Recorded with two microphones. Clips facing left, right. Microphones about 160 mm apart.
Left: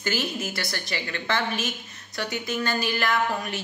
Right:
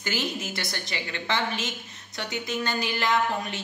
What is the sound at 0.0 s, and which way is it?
A woman's voice, 15° right (ahead or behind).